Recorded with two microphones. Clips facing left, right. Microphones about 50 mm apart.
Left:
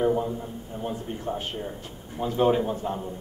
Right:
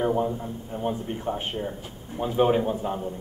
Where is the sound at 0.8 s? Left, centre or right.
Right.